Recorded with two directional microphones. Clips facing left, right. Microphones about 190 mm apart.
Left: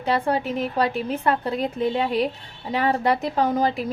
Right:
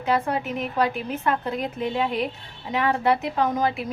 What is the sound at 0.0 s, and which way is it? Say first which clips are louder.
A woman's voice: left 1 dB; 35° left (ahead or behind).